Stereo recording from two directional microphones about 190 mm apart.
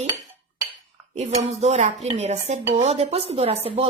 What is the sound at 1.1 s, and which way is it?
A woman's voice, 35° right (ahead or behind).